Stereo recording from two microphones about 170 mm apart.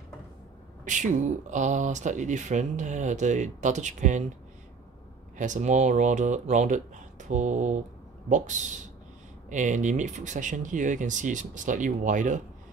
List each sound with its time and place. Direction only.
0.8 s speech: 45° right (ahead or behind)
5.4 s speech: 45° right (ahead or behind)